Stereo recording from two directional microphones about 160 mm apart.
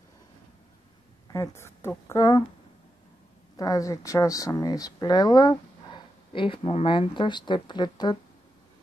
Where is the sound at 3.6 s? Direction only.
20° left (ahead or behind).